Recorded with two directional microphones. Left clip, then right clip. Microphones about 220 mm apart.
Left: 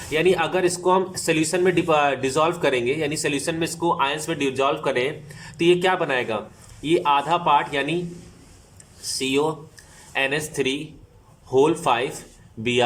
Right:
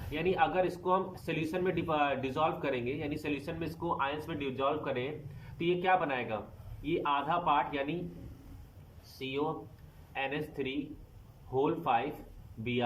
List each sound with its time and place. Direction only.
0.1 s speech: 25° left (ahead or behind)
9.1 s speech: 25° left (ahead or behind)